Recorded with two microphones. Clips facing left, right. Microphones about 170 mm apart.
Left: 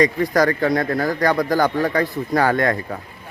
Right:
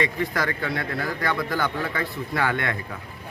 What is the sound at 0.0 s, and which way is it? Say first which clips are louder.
A man's voice: left 9 dB; 40° left (ahead or behind).